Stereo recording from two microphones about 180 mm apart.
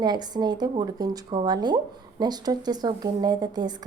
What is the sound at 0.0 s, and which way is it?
Speech, 25° right (ahead or behind).